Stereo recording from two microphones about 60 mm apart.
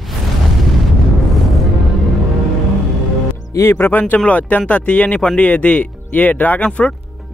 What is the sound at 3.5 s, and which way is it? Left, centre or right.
Speech, left.